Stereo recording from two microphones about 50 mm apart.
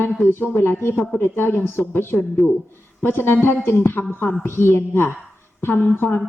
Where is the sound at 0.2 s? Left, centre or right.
Left.